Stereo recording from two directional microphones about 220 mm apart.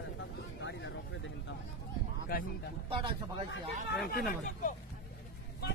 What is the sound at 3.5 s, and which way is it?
Speech, 45° left (ahead or behind).